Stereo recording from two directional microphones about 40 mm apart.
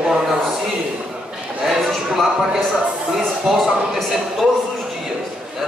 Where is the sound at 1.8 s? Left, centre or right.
Centre.